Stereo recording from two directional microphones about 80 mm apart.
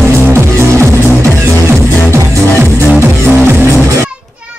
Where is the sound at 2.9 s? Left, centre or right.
Right.